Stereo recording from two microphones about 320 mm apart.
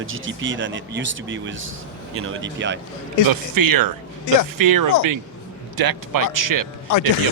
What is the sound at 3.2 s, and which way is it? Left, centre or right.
Speech, right.